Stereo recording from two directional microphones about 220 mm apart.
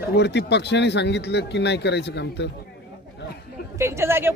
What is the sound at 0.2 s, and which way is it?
Speech, 50° left (ahead or behind).